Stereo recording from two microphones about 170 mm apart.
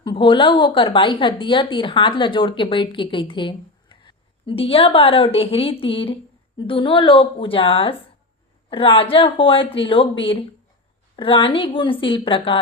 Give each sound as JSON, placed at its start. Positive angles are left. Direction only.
{"t": 0.0, "sound": "a woman's voice", "side_deg": 30}